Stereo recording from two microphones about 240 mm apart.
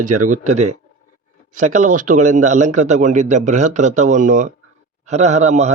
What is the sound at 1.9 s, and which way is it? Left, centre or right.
Speech, right.